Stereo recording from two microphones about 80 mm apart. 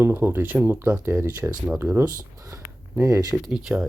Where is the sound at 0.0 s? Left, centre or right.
Right.